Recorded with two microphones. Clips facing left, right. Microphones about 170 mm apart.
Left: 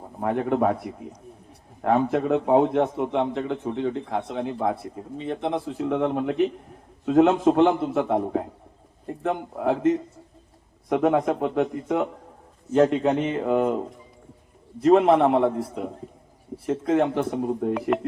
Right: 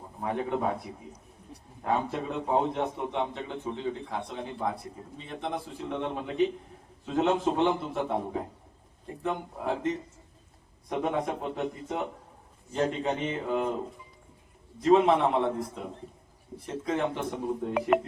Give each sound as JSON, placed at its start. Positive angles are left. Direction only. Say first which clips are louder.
{"t": 0.2, "sound": "speech", "louder": "left 7 dB", "side_deg": 60}
{"t": 14.8, "sound": "a man's voice", "louder": "left 5 dB", "side_deg": 55}
{"t": 16.6, "sound": "speech", "louder": "left 8 dB", "side_deg": 60}
{"t": 17.7, "sound": "speech", "louder": "left 1 dB", "side_deg": -5}